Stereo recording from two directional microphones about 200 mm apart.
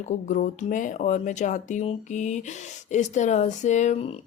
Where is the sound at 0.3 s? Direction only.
40° left (ahead or behind).